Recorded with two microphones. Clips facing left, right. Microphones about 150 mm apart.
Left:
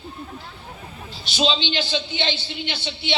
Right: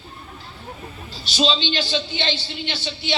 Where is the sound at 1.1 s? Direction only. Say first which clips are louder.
Right 1 dB; 60° left (ahead or behind).